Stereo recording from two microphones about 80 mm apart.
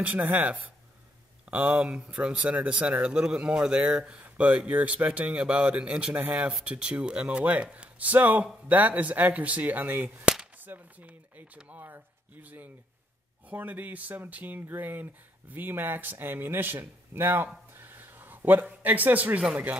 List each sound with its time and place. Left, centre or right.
0.0 s speech: centre
17.7 s a sound: right
18.8 s speech: right